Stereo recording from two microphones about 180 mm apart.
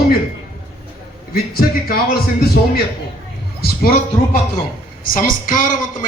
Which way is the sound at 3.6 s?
55° left (ahead or behind).